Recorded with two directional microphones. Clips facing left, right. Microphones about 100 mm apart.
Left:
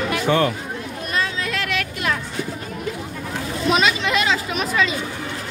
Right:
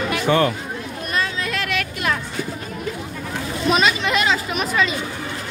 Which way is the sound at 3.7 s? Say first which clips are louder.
Right 1 dB; 45° right (ahead or behind).